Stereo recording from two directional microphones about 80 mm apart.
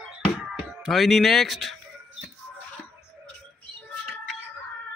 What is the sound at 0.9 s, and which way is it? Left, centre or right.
Speech, centre.